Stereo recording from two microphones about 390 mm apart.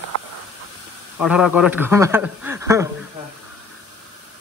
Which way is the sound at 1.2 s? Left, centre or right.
Centre.